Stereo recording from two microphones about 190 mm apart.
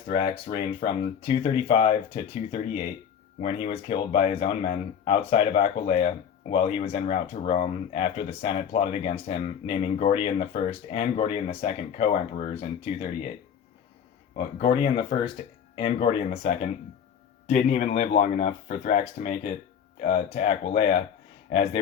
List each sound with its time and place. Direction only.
0.1 s speech: 30° left (ahead or behind)
14.3 s speech: 25° left (ahead or behind)
17.4 s speech: 40° left (ahead or behind)